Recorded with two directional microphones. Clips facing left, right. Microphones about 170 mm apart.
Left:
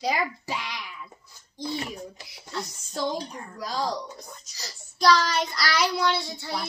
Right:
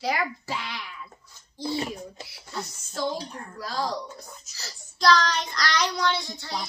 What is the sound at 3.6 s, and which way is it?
A woman's voice, 15° left (ahead or behind).